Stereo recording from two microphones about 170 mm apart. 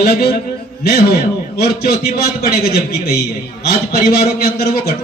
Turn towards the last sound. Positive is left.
turn(degrees=65)  # may be behind; listen again after turning